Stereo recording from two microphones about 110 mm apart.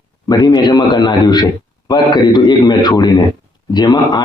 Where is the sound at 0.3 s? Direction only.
40° left (ahead or behind).